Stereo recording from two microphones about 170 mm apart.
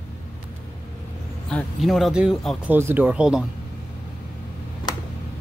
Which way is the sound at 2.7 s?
10° right (ahead or behind).